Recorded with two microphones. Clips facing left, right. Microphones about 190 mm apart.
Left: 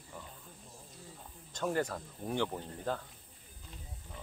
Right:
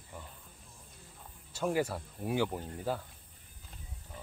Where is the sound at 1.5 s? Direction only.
10° right (ahead or behind).